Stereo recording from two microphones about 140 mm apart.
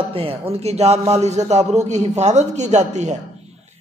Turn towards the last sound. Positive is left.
turn(degrees=-55)  # may be behind; listen again after turning